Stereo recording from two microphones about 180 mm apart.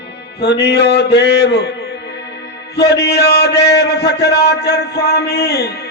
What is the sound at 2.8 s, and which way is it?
A man's voice, 65° left (ahead or behind).